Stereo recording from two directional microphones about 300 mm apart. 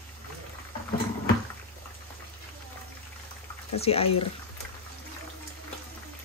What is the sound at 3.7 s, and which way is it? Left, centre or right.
Speech, centre.